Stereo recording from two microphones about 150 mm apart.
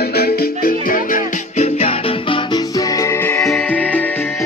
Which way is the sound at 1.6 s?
40° left (ahead or behind).